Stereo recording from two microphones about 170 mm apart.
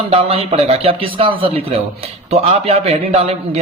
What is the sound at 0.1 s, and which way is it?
A man's voice, 35° right (ahead or behind).